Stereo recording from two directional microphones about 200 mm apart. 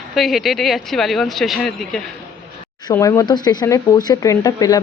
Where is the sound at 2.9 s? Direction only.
15° left (ahead or behind).